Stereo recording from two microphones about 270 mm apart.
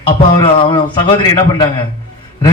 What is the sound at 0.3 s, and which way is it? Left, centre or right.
A man's voice, centre.